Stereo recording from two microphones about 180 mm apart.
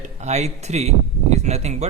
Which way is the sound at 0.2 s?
40° right (ahead or behind).